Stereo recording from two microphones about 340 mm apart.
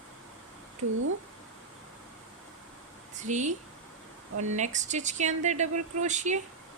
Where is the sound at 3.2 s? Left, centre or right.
Right.